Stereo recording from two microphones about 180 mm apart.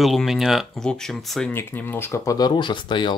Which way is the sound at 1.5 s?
10° left (ahead or behind).